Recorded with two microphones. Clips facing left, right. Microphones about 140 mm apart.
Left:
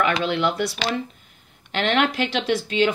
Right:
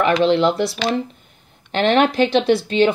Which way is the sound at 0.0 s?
30° right (ahead or behind).